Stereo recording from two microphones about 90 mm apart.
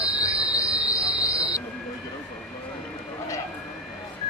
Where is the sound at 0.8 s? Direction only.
40° left (ahead or behind).